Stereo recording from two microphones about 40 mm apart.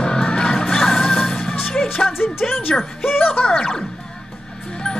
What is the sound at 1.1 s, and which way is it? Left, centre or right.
Music, centre.